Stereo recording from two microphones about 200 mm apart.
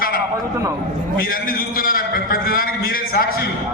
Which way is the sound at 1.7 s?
45° left (ahead or behind).